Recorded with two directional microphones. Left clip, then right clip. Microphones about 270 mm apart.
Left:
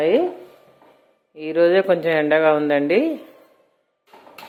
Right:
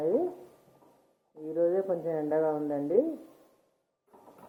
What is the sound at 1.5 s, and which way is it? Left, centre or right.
Speech, left.